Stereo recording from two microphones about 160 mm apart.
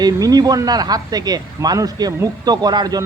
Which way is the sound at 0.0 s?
25° right (ahead or behind).